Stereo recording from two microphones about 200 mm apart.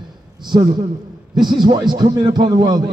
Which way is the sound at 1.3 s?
20° right (ahead or behind).